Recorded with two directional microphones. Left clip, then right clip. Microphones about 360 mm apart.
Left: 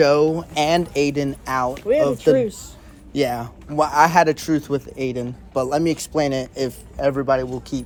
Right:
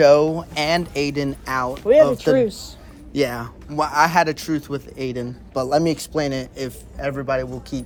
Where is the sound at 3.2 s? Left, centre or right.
Centre.